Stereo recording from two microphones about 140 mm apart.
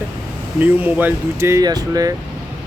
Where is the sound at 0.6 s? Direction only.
10° right (ahead or behind).